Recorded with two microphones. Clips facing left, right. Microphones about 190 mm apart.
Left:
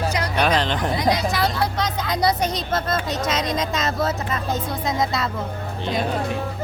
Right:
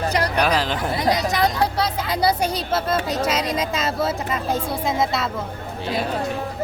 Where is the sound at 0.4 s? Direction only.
5° right (ahead or behind).